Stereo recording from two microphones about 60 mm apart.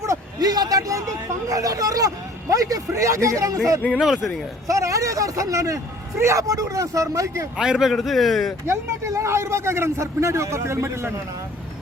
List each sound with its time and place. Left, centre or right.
0.0 s speech: right
4.0 s a man's voice: centre
4.7 s speech: right
7.5 s a man's voice: centre
8.6 s speech: right